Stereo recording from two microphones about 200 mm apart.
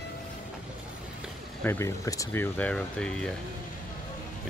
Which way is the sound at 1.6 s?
10° left (ahead or behind).